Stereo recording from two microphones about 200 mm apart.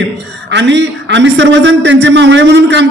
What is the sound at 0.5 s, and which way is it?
A man's voice, 60° right (ahead or behind).